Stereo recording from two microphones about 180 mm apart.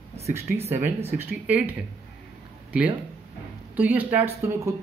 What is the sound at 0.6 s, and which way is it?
Speech, 10° right (ahead or behind).